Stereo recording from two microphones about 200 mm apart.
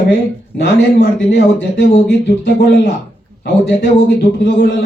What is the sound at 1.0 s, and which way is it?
A man's voice, 55° left (ahead or behind).